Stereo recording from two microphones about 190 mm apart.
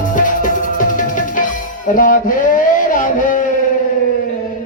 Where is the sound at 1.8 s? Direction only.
45° left (ahead or behind).